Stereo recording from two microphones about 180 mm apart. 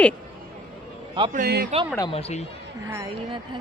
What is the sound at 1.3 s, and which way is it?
Speech, 60° right (ahead or behind).